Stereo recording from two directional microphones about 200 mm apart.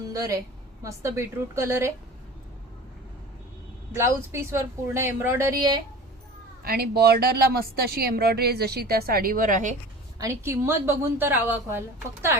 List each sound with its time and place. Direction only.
0.1 s a woman's voice: 15° right (ahead or behind)
3.9 s a woman's voice: 15° right (ahead or behind)
6.7 s speech: 50° right (ahead or behind)
10.2 s a woman's voice: 15° right (ahead or behind)